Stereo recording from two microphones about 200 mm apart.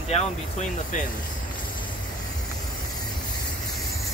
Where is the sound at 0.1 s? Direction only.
35° left (ahead or behind).